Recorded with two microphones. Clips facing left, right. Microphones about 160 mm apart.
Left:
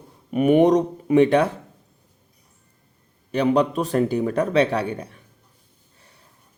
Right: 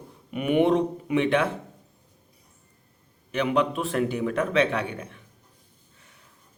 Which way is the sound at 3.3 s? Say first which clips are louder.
Left 5 dB; 35° left (ahead or behind).